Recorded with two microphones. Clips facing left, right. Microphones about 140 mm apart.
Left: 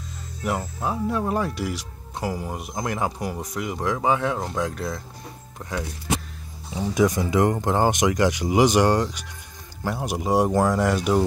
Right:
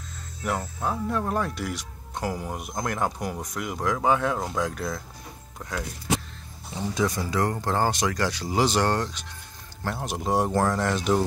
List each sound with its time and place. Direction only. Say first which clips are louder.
0.4 s speech: left 2 dB; 5° left (ahead or behind)
6.7 s speech: left 5 dB; 15° left (ahead or behind)